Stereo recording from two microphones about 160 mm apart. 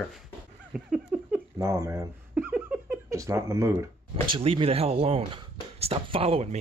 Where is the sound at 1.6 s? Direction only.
20° right (ahead or behind).